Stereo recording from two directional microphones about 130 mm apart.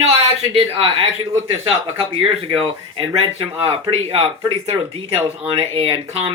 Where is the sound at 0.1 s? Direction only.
50° right (ahead or behind).